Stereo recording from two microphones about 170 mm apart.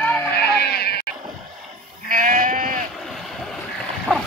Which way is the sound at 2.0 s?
50° right (ahead or behind).